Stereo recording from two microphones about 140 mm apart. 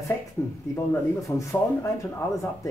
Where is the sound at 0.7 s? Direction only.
20° left (ahead or behind).